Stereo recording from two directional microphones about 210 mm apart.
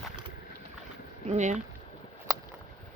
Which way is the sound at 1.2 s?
35° right (ahead or behind).